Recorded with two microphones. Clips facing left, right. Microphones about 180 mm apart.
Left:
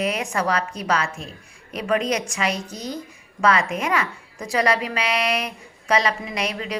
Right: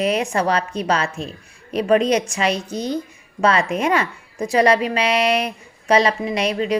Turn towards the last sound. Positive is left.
turn(degrees=-25)  # may be behind; listen again after turning